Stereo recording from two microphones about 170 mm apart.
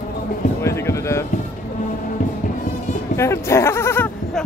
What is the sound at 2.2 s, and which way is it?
Music, 50° left (ahead or behind).